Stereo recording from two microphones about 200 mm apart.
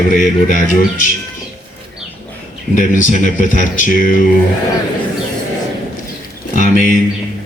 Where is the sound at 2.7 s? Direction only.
40° left (ahead or behind).